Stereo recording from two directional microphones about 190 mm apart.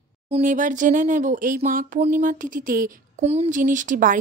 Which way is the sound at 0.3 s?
45° right (ahead or behind).